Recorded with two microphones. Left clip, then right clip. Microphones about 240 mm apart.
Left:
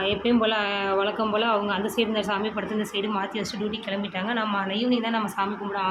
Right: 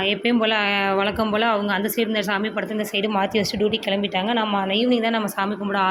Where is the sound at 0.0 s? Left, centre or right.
Right.